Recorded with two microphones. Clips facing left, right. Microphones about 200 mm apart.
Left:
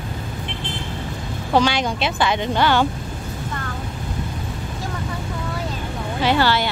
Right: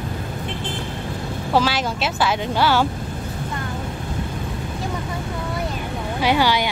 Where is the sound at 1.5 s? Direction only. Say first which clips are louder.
Left 2 dB; 5° right (ahead or behind).